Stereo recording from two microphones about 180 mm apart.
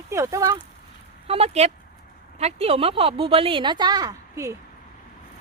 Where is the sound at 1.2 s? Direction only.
35° right (ahead or behind); by 4.5 s 20° right (ahead or behind).